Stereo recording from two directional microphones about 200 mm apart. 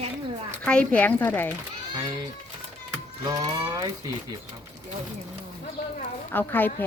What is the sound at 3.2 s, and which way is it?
Mechanisms, 20° right (ahead or behind).